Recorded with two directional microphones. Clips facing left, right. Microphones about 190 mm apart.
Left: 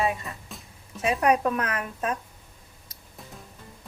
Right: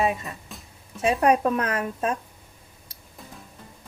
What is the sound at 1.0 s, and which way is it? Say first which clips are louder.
A woman's voice: right 2 dB; 30° right (ahead or behind).